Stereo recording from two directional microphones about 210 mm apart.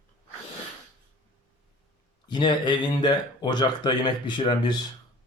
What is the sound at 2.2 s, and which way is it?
Speech, 20° left (ahead or behind).